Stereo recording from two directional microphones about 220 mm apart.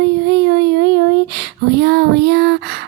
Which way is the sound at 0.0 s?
50° right (ahead or behind).